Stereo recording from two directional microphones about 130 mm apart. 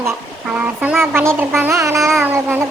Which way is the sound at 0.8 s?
15° right (ahead or behind).